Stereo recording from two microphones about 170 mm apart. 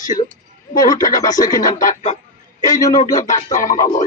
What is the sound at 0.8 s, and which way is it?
Speech, 20° left (ahead or behind).